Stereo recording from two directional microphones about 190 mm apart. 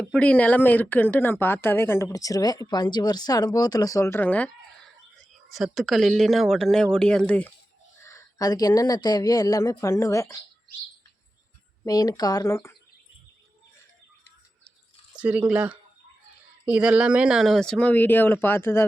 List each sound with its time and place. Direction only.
0.0 s a woman's voice: 5° left (ahead or behind)
8.0 s speech: 20° left (ahead or behind)
11.9 s speech: 20° left (ahead or behind)
15.1 s speech: 5° right (ahead or behind); by 18.9 s 10° left (ahead or behind)